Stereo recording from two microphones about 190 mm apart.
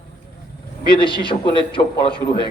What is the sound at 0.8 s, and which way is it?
A man's voice, 25° left (ahead or behind).